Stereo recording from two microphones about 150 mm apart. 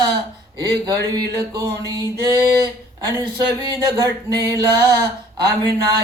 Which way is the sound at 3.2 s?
35° right (ahead or behind).